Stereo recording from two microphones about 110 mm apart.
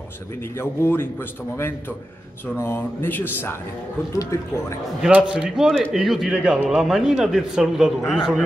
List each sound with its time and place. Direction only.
0.4 s a man's voice: 20° left (ahead or behind)
5.0 s a man's voice: 10° right (ahead or behind)